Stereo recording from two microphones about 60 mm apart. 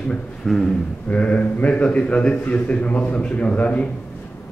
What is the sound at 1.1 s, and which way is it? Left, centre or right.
A man's voice, left.